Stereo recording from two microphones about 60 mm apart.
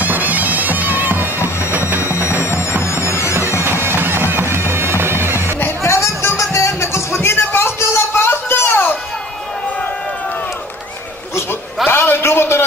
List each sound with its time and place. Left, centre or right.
0.0 s bagpipes: right
2.0 s music: left
3.8 s music: right
5.9 s music: left
11.9 s a sound: left